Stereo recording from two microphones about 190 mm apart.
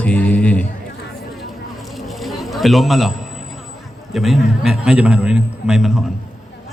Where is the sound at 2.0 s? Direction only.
Centre (ahead or behind).